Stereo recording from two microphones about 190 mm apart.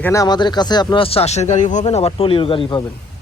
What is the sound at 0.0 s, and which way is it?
Speech, 15° left (ahead or behind).